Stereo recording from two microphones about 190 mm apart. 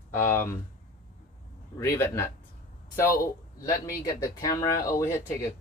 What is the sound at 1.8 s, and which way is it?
Speech, 15° left (ahead or behind).